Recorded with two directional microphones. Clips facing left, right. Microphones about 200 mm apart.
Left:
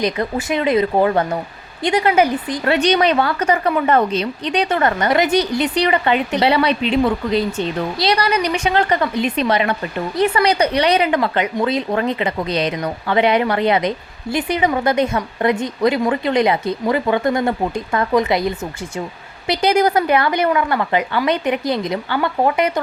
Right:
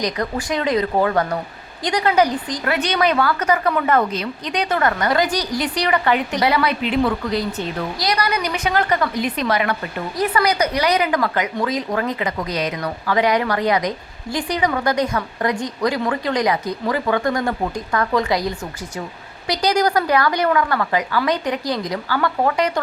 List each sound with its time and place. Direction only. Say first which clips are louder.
0.0 s speech: left 3 dB; 25° left (ahead or behind)